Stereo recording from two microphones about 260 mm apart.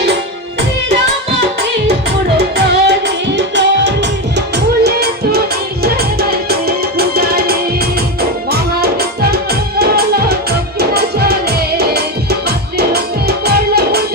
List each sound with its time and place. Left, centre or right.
2.4 s music: right